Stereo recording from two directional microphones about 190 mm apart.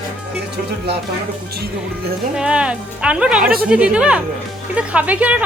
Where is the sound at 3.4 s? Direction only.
50° right (ahead or behind).